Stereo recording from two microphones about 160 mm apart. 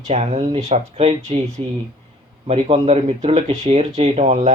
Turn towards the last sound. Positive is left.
turn(degrees=-45)  # may be behind; listen again after turning